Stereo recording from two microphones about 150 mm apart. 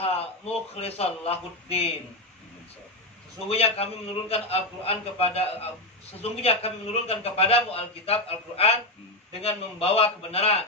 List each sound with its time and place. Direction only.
0.0 s speech: 40° left (ahead or behind)
3.4 s a man's voice: 40° left (ahead or behind)